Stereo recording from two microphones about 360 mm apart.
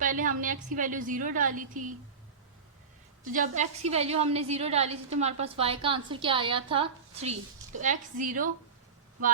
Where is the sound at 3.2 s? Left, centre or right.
Right.